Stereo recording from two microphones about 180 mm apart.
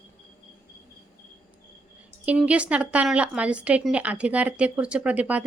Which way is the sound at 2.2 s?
5° right (ahead or behind).